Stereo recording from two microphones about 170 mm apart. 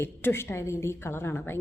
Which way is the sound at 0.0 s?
15° left (ahead or behind).